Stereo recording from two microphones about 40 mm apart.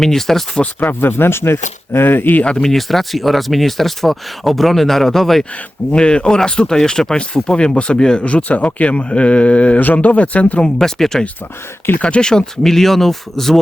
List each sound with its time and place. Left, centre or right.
0.0 s speech: centre
0.8 s speech: left
2.4 s speech: left
2.6 s speech: centre
5.9 s speech: left
8.2 s speech: left
10.6 s speech: centre
12.0 s speech: left
12.6 s speech: centre